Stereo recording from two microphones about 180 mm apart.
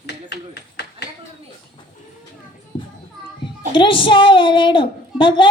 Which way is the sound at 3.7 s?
30° left (ahead or behind).